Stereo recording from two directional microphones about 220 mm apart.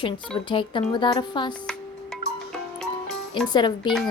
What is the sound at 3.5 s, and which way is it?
Speech, 20° left (ahead or behind).